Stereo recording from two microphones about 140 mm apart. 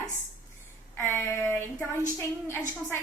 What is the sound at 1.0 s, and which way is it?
Speech, 15° left (ahead or behind).